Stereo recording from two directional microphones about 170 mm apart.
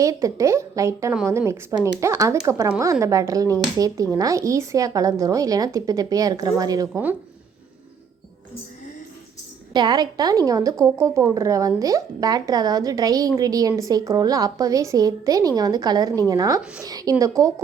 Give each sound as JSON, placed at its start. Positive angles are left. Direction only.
{"t": 0.0, "sound": "speech", "side_deg": -20}
{"t": 9.7, "sound": "speech", "side_deg": -25}